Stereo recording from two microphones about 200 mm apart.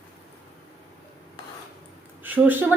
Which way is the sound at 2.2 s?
10° right (ahead or behind).